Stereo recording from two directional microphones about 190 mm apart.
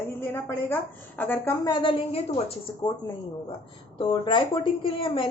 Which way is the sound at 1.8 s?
30° left (ahead or behind).